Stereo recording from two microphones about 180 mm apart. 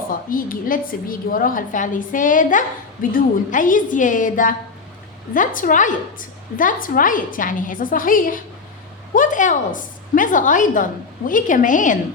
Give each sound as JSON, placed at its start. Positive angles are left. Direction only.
{"t": 0.3, "sound": "a woman's voice", "side_deg": 50}